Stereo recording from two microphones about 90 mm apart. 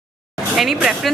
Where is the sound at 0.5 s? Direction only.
5° right (ahead or behind).